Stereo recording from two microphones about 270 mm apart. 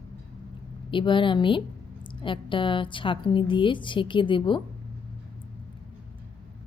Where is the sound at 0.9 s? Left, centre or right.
Centre.